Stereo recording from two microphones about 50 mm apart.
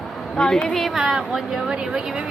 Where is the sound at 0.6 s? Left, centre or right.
Centre.